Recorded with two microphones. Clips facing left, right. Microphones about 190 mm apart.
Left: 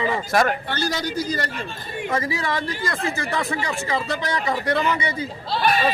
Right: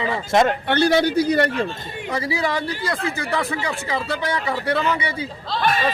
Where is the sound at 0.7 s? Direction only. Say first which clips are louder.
Right 8 dB; 65° right (ahead or behind).